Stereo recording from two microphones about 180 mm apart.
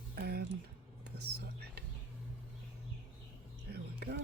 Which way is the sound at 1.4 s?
65° right (ahead or behind).